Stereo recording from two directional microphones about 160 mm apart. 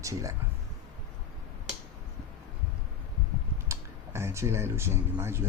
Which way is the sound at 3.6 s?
15° right (ahead or behind).